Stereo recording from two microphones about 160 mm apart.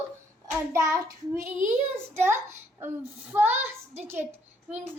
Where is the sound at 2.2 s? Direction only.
15° right (ahead or behind).